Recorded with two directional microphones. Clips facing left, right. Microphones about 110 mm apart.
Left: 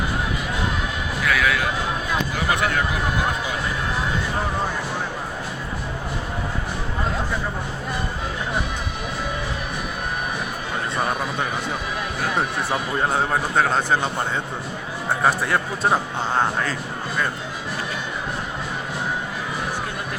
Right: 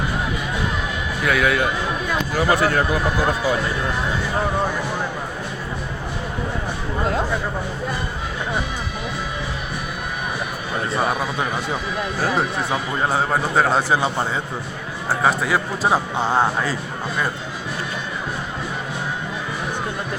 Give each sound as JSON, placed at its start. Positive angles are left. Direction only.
{"t": 1.2, "sound": "a man's voice", "side_deg": -30}
{"t": 11.1, "sound": "a man's voice", "side_deg": -5}
{"t": 12.7, "sound": "a man's voice", "side_deg": -5}